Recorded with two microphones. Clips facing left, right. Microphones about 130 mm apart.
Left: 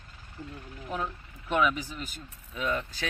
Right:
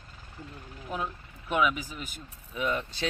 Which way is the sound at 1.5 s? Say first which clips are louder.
Even; 10° right (ahead or behind).